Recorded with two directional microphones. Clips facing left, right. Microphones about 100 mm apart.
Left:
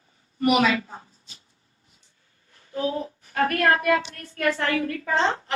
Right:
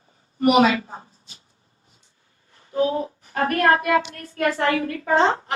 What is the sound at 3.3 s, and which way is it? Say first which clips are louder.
A woman's voice: right 2 dB; 30° right (ahead or behind).